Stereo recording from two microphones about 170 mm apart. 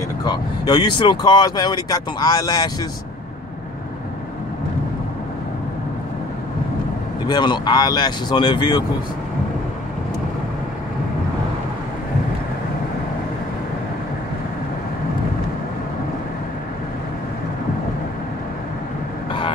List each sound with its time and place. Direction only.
0.2 s speech: 25° left (ahead or behind)
7.2 s speech: 25° left (ahead or behind)